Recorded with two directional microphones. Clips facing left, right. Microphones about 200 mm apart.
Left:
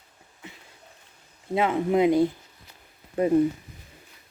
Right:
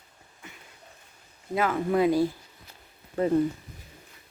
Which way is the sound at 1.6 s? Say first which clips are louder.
Left 2 dB; 20° left (ahead or behind).